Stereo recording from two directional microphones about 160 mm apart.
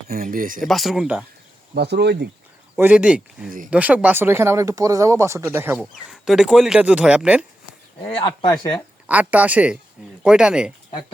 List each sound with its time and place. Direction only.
0.1 s speech: 60° right (ahead or behind)
0.6 s speech: centre (ahead or behind)
1.7 s speech: 90° right
2.7 s speech: 10° right (ahead or behind)
5.8 s speech: 5° right (ahead or behind)
8.0 s a man's voice: 30° left (ahead or behind)
9.0 s speech: 10° right (ahead or behind)